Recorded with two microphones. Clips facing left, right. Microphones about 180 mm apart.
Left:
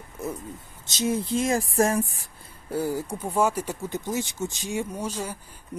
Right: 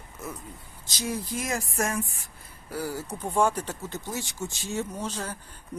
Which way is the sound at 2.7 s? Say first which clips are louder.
Left 5 dB; 20° left (ahead or behind).